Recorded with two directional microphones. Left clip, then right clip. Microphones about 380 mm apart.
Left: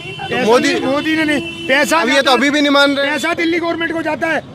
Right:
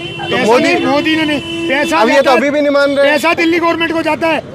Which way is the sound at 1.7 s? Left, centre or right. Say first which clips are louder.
Left 1 dB; left.